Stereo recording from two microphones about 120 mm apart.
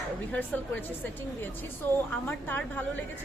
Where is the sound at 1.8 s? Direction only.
15° left (ahead or behind).